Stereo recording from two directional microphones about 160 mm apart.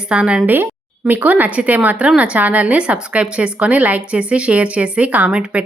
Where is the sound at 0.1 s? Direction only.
5° right (ahead or behind).